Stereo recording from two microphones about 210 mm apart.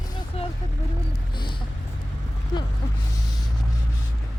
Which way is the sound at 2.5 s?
20° left (ahead or behind).